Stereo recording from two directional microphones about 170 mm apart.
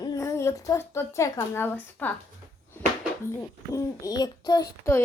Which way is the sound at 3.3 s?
15° left (ahead or behind).